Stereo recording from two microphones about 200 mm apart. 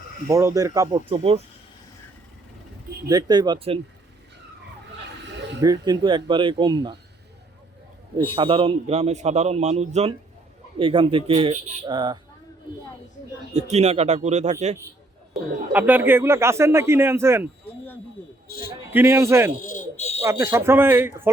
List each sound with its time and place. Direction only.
0.3 s speech: 15° right (ahead or behind)
1.0 s speech: 30° right (ahead or behind)
3.1 s speech: 20° right (ahead or behind)
5.5 s speech: 20° right (ahead or behind)
8.2 s a man's voice: 25° right (ahead or behind)
13.5 s a man's voice: 35° right (ahead or behind)
15.3 s speech: 10° right (ahead or behind)
18.9 s speech: 10° right (ahead or behind)
19.6 s fire alarm: 40° left (ahead or behind)
20.2 s speech: 15° right (ahead or behind)